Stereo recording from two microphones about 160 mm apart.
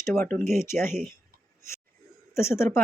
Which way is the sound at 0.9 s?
Centre (ahead or behind).